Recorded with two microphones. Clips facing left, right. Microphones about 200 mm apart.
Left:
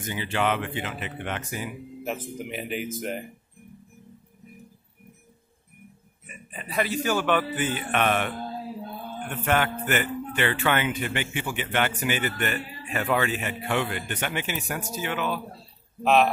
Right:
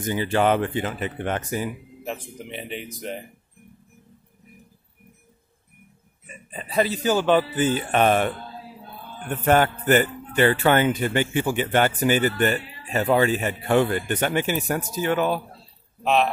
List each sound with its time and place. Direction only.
0.0 s speech: 40° right (ahead or behind)
2.0 s speech: centre (ahead or behind)
6.5 s a man's voice: 30° right (ahead or behind)
9.3 s a man's voice: 40° right (ahead or behind)
16.0 s speech: centre (ahead or behind)